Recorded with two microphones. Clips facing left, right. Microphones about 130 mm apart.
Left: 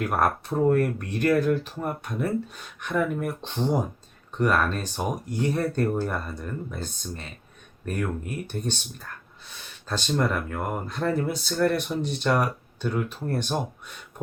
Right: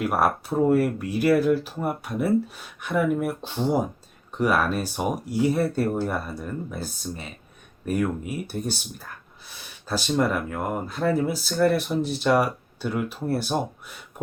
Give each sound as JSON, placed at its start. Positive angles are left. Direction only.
{"t": 0.0, "sound": "speech", "side_deg": -5}